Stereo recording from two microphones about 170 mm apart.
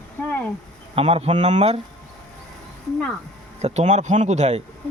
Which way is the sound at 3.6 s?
40° right (ahead or behind).